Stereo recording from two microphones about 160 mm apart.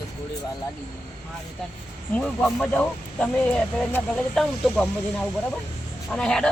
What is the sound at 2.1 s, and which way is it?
Speech, 5° left (ahead or behind).